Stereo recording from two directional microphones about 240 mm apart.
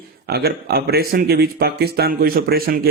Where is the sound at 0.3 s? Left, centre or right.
Right.